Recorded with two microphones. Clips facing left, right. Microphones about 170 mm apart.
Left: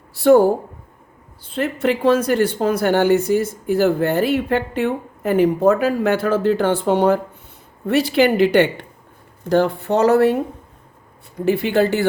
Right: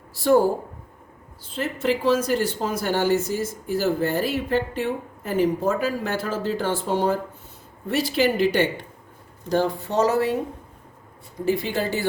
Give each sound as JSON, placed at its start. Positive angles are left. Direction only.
{"t": 0.1, "sound": "speech", "side_deg": 65}
{"t": 11.3, "sound": "speech", "side_deg": 65}